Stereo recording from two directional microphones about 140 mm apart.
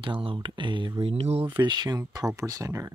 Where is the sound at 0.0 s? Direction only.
40° right (ahead or behind).